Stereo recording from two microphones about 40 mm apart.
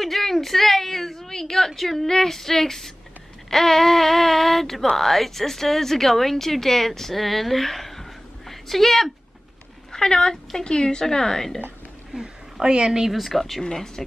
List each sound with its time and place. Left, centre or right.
0.0 s a sound: centre
1.8 s speech: centre
9.9 s speech: left
12.1 s a woman's voice: centre
13.1 s speech: centre
13.6 s speech: centre